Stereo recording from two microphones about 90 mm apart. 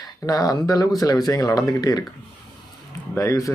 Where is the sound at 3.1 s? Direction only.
30° left (ahead or behind).